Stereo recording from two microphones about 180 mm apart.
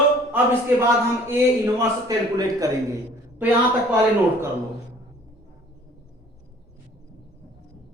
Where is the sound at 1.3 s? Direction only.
15° right (ahead or behind).